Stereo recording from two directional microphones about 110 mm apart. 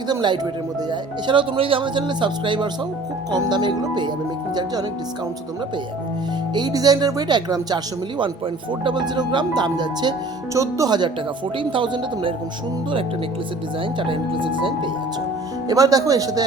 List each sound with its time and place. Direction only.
0.1 s speech: 45° right (ahead or behind)
6.5 s speech: 40° right (ahead or behind)
8.8 s speech: 45° right (ahead or behind)
10.5 s speech: 30° right (ahead or behind)
11.7 s speech: 50° right (ahead or behind)
14.0 s speech: 50° right (ahead or behind)
15.7 s speech: 35° right (ahead or behind)